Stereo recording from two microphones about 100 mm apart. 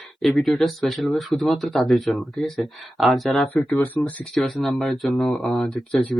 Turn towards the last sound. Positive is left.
turn(degrees=10)  # may be behind; listen again after turning